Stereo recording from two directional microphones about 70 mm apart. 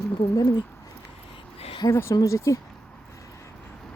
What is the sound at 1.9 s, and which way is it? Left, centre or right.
Speech, left.